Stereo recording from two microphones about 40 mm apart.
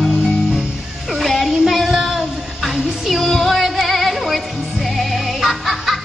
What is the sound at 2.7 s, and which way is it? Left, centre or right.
Music, centre.